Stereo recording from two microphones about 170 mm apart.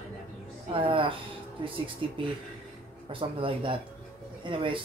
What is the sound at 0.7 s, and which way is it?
Speech, 30° right (ahead or behind).